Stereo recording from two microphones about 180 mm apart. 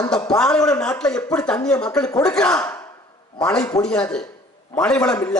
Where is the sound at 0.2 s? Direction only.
5° left (ahead or behind).